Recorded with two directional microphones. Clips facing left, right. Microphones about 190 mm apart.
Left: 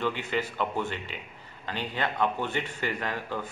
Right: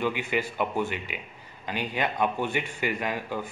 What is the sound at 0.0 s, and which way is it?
A man's voice, 10° right (ahead or behind).